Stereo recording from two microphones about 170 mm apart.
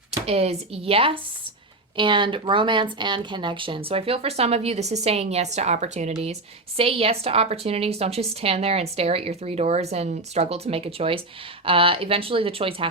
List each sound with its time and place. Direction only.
0.3 s a woman's voice: 35° right (ahead or behind)